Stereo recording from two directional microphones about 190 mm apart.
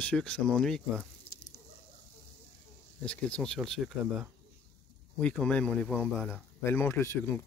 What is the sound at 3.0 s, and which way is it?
Speech, 5° left (ahead or behind).